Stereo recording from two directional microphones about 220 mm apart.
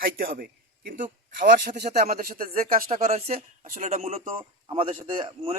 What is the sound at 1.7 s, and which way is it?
A man's voice, 45° right (ahead or behind).